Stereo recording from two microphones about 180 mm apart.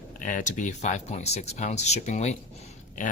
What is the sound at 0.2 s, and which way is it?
Speech, 45° left (ahead or behind).